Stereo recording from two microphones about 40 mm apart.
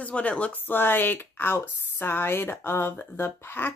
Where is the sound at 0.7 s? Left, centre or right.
Left.